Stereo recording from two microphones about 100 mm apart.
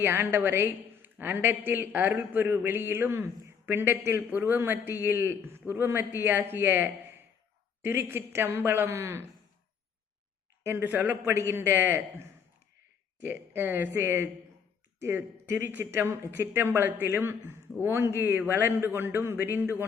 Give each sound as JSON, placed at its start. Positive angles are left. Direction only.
{"t": 0.0, "sound": "a woman's voice", "side_deg": -20}
{"t": 10.6, "sound": "a woman's voice", "side_deg": -20}
{"t": 11.3, "sound": "a woman's voice", "side_deg": -25}
{"t": 13.2, "sound": "a woman's voice", "side_deg": -20}